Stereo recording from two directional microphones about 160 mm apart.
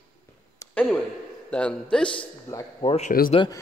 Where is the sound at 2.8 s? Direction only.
40° left (ahead or behind).